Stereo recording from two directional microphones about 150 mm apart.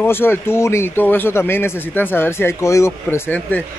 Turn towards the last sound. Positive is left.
turn(degrees=10)  # may be behind; listen again after turning